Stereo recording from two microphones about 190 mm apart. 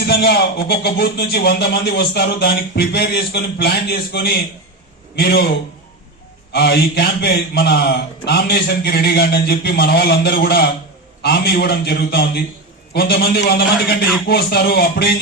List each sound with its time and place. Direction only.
0.0 s speech: 55° left (ahead or behind)
6.5 s speech: 60° left (ahead or behind)